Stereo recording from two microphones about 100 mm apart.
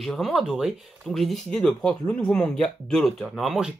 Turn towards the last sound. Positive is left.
turn(degrees=0)  # may be behind; listen again after turning